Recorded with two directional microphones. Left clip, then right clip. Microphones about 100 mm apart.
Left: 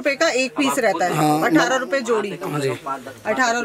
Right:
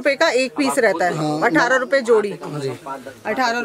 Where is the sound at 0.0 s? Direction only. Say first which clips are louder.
Right 2 dB; 40° right (ahead or behind).